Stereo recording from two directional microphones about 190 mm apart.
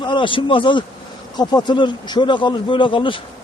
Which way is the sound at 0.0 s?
25° left (ahead or behind).